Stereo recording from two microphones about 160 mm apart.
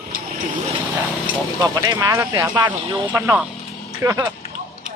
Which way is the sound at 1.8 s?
20° right (ahead or behind).